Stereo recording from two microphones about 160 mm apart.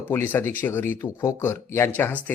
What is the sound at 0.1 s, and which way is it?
Speech, 15° left (ahead or behind).